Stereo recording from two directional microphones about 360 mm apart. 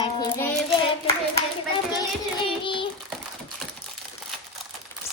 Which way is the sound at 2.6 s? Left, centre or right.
Centre.